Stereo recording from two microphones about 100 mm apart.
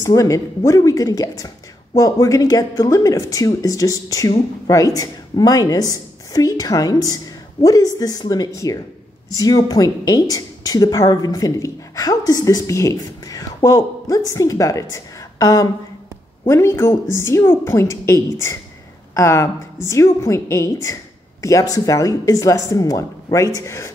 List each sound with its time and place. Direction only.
0.0 s a woman's voice: 35° left (ahead or behind)
16.4 s a woman's voice: 25° left (ahead or behind)